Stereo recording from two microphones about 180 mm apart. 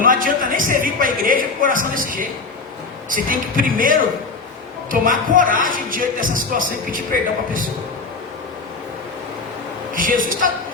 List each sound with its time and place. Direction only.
0.0 s a sound: 50° right (ahead or behind)
3.1 s speech: 50° right (ahead or behind)
9.9 s speech: 50° right (ahead or behind)